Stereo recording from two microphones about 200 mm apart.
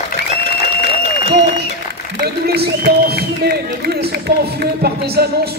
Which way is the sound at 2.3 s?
50° right (ahead or behind).